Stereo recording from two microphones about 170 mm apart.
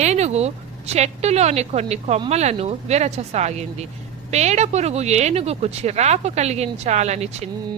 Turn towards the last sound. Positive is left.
turn(degrees=-40)  # may be behind; listen again after turning